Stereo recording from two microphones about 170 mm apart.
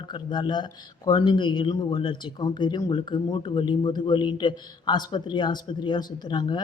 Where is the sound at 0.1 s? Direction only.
25° left (ahead or behind).